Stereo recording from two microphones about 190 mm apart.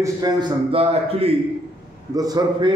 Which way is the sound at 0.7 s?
30° right (ahead or behind).